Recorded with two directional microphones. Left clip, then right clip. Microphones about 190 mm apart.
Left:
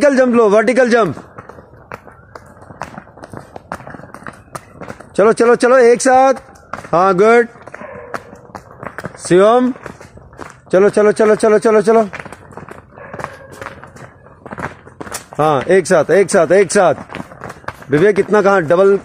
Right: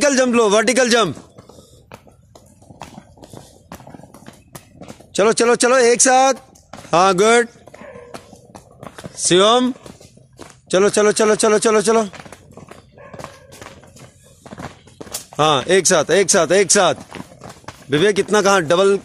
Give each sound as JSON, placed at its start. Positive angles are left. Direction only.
{"t": 0.0, "sound": "speech", "side_deg": -20}
{"t": 3.6, "sound": "a sound", "side_deg": -10}
{"t": 5.4, "sound": "speech", "side_deg": -20}
{"t": 8.1, "sound": "a sound", "side_deg": 5}
{"t": 9.3, "sound": "speech", "side_deg": -20}
{"t": 10.7, "sound": "speech", "side_deg": -25}
{"t": 15.3, "sound": "speech", "side_deg": -25}